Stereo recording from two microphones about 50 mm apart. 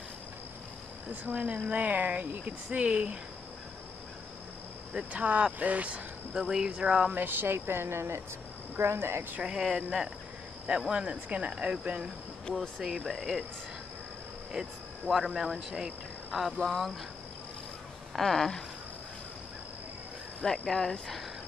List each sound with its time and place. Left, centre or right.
1.2 s speech: right
4.9 s speech: right
6.5 s speech: centre
7.2 s a woman's voice: right
7.5 s a woman's voice: right
9.4 s speech: centre
12.8 s speech: centre
14.5 s speech: centre
16.3 s speech: centre
18.1 s speech: centre
20.4 s speech: centre